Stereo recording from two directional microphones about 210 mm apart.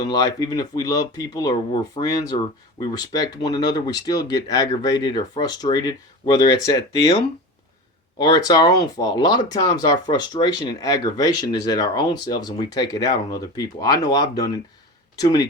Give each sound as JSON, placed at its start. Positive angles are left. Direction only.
{"t": 0.0, "sound": "speech", "side_deg": 20}
{"t": 8.2, "sound": "speech", "side_deg": 20}